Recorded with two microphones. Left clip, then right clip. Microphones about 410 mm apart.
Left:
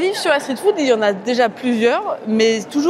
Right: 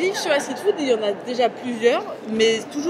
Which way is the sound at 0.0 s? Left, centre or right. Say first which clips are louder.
Left 4 dB; left.